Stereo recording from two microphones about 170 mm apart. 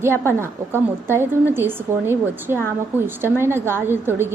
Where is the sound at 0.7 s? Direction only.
15° right (ahead or behind).